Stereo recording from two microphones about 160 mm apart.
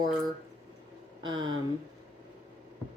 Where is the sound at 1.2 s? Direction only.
30° right (ahead or behind).